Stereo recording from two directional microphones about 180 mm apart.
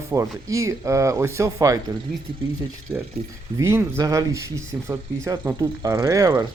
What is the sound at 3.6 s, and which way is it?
Speech, 15° right (ahead or behind).